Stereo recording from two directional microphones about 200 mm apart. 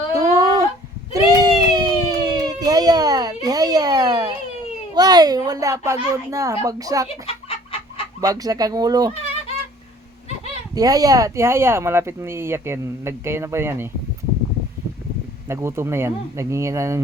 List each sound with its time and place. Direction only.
0.1 s a sound: 15° right (ahead or behind)
3.4 s children playing: 20° right (ahead or behind)
4.9 s speech: 20° right (ahead or behind)
7.3 s chicken: 25° left (ahead or behind)
8.2 s speech: 15° right (ahead or behind)
10.8 s speech: 20° right (ahead or behind)
15.4 s speech: 15° right (ahead or behind)